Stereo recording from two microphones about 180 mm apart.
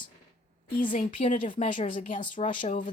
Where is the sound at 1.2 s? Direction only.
30° left (ahead or behind).